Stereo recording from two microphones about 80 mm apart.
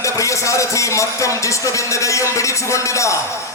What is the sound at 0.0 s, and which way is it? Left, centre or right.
A man's voice, left.